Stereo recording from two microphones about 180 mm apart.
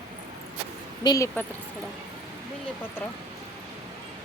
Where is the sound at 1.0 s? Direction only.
20° left (ahead or behind).